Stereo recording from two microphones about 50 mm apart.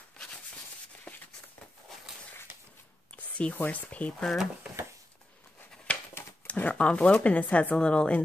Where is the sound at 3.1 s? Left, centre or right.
Left.